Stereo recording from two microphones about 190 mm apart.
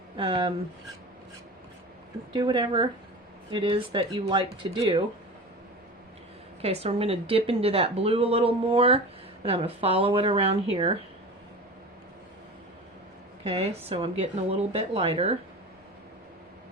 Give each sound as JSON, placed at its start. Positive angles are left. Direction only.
{"t": 0.2, "sound": "speech", "side_deg": -25}
{"t": 2.3, "sound": "speech", "side_deg": -25}
{"t": 6.6, "sound": "speech", "side_deg": -30}
{"t": 13.4, "sound": "a woman's voice", "side_deg": -30}